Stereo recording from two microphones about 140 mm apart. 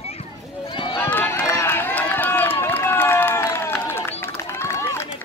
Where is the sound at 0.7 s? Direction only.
40° left (ahead or behind).